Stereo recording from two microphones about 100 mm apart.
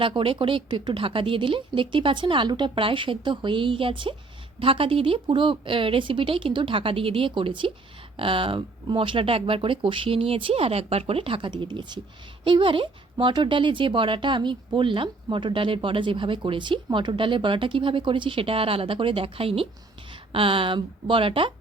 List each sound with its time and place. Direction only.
0.2 s speech: 60° right (ahead or behind)